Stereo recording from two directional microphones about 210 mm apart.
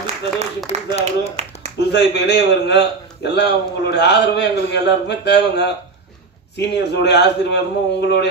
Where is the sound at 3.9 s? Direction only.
55° left (ahead or behind).